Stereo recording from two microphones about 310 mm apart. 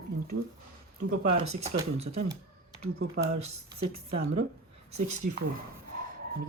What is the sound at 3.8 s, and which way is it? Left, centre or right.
Speech, right.